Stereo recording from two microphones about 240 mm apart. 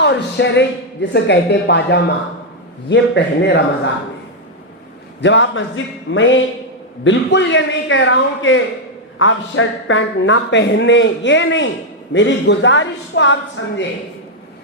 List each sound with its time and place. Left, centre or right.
0.0 s a man's voice: left
5.2 s a man's voice: left